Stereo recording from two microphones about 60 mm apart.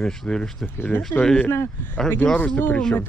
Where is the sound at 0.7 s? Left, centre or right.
Left.